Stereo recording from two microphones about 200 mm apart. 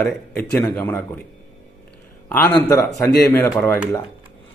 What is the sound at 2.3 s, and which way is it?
Speech, 5° left (ahead or behind).